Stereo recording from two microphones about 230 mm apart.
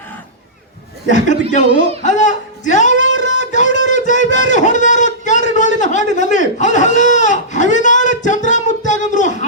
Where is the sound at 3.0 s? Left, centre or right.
Left.